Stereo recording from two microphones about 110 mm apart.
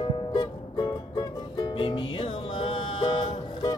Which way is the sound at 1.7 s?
50° left (ahead or behind).